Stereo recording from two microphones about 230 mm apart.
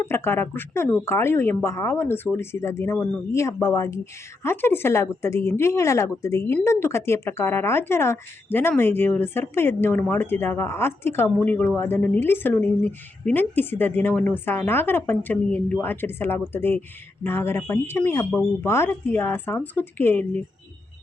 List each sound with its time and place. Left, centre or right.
0.0 s speech: centre